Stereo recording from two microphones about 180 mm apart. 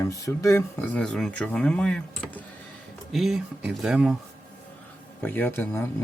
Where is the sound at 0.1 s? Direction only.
15° left (ahead or behind); by 4.2 s 5° right (ahead or behind).